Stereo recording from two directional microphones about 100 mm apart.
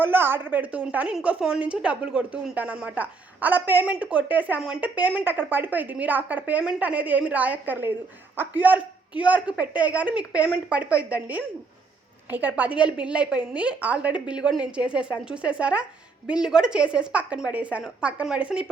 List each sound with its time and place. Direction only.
0.0 s a woman's voice: 20° right (ahead or behind)